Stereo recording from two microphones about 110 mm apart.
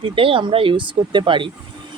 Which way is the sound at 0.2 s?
55° right (ahead or behind).